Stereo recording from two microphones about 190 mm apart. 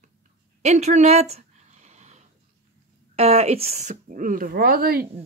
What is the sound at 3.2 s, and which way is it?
Speech, 30° right (ahead or behind).